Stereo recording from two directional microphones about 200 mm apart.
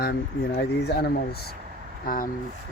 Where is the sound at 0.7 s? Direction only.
55° left (ahead or behind).